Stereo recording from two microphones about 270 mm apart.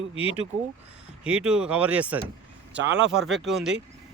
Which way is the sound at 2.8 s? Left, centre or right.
Right.